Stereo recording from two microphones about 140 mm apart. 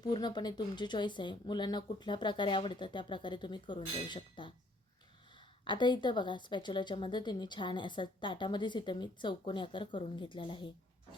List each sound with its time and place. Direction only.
0.0 s speech: 30° left (ahead or behind)
5.6 s speech: 35° left (ahead or behind)